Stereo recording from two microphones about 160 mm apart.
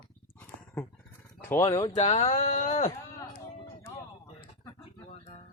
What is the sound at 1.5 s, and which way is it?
Speech, 20° left (ahead or behind).